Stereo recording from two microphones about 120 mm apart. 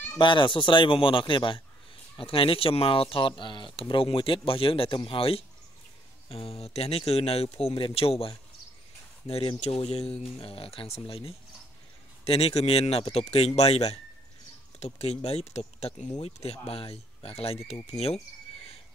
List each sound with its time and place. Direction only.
0.2 s a man's voice: 45° left (ahead or behind); by 18.2 s 60° left (ahead or behind)